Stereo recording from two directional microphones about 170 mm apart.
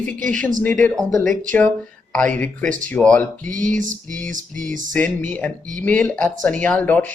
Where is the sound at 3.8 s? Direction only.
50° right (ahead or behind).